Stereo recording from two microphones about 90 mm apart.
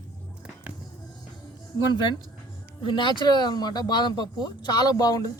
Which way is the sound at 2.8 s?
65° left (ahead or behind).